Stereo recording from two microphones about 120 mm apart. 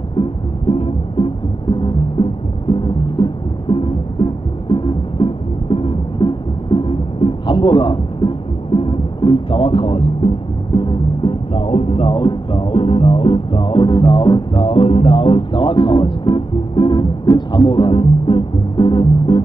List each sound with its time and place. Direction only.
0.2 s music: 50° left (ahead or behind)
10.8 s speech: 45° left (ahead or behind)